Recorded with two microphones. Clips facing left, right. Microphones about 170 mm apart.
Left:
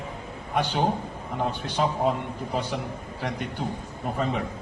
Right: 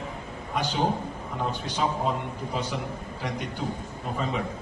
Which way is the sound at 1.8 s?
55° left (ahead or behind).